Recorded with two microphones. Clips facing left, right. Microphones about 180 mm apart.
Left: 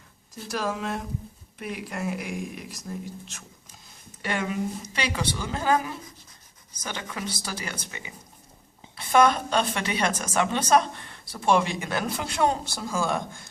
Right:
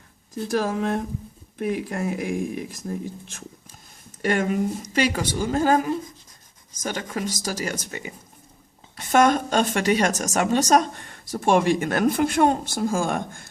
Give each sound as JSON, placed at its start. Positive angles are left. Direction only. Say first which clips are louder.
{"t": 0.4, "sound": "a woman's voice", "louder": "right 6 dB", "side_deg": -50}